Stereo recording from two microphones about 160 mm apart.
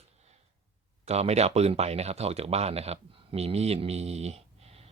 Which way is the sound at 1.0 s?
40° right (ahead or behind).